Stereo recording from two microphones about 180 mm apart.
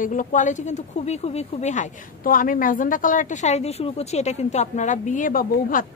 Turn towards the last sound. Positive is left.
turn(degrees=50)  # may be behind; listen again after turning